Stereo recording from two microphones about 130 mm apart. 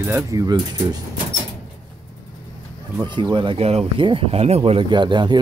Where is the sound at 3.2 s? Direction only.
40° right (ahead or behind).